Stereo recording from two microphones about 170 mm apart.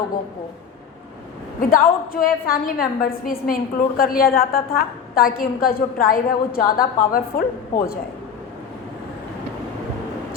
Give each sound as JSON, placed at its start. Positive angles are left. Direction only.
{"t": 1.7, "sound": "a woman's voice", "side_deg": 55}